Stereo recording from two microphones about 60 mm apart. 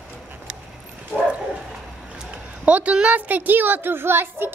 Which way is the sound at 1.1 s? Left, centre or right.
Right.